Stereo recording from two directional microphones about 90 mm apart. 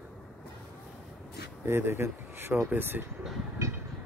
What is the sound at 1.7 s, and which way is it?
A man's voice, 25° right (ahead or behind).